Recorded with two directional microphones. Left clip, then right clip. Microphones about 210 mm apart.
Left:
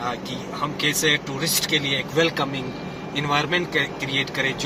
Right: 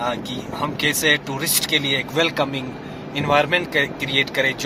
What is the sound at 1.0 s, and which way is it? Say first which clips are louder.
Speech: right 3 dB; 40° right (ahead or behind).